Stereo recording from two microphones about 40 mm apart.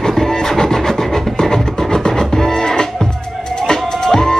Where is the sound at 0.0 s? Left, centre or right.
Centre.